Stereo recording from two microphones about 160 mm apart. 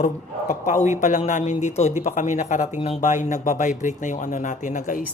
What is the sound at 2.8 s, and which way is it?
A woman's voice, 40° left (ahead or behind).